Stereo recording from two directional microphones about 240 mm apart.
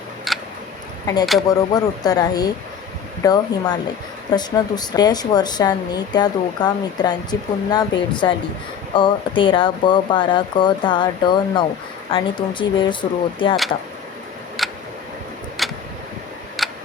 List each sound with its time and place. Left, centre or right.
0.3 s a sound: centre
1.2 s speech: centre
1.5 s speech: centre
14.6 s tick: centre
15.6 s vehicle: centre
16.6 s tick: centre